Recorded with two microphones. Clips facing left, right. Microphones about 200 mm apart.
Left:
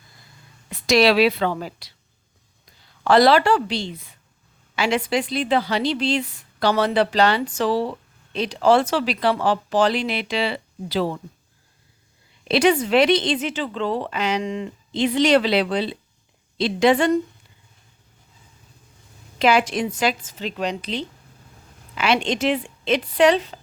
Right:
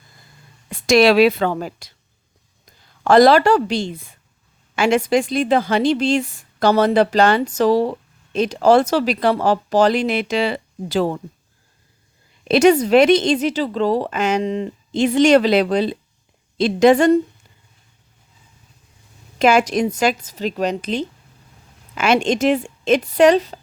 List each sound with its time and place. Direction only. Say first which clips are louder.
0.7 s a woman's voice: right 4 dB; 50° right (ahead or behind)
12.5 s a woman's voice: right 5 dB; 45° right (ahead or behind)
19.4 s a woman's voice: right 4 dB; 45° right (ahead or behind)